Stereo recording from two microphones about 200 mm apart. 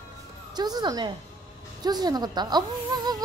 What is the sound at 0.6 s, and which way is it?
Speech, 20° right (ahead or behind).